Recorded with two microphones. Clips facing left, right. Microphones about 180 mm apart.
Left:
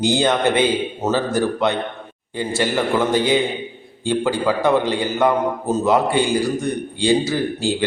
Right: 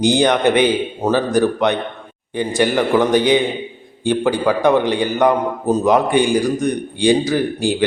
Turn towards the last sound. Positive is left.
turn(degrees=-15)  # may be behind; listen again after turning